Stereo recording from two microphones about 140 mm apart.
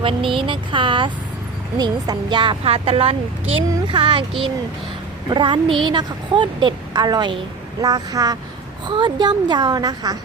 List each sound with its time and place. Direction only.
0.0 s a woman's voice: 40° right (ahead or behind)